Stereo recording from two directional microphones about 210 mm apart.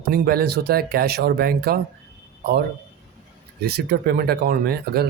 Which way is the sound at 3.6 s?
50° right (ahead or behind).